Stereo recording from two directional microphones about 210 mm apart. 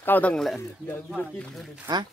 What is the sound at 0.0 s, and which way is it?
Speech, 10° left (ahead or behind).